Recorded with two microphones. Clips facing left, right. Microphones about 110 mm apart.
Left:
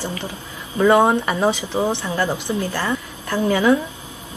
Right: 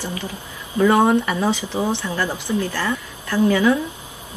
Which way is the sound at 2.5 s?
40° left (ahead or behind).